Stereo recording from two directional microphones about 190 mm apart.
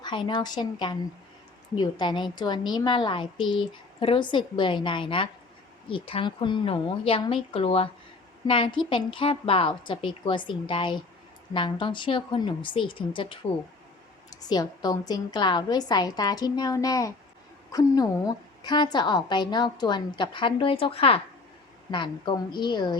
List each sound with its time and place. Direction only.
0.0 s a woman's voice: 25° left (ahead or behind)
14.4 s a woman's voice: 20° left (ahead or behind)